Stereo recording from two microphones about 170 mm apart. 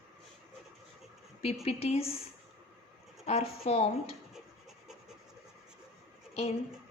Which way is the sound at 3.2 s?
35° left (ahead or behind).